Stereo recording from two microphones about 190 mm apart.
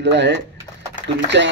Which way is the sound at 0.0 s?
65° right (ahead or behind).